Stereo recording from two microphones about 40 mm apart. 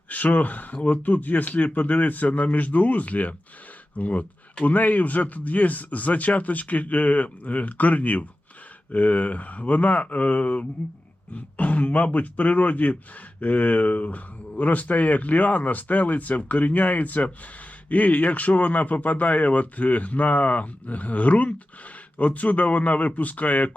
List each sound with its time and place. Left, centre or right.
0.1 s speech: left